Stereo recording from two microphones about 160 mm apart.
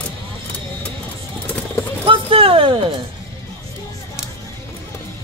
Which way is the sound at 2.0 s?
35° right (ahead or behind).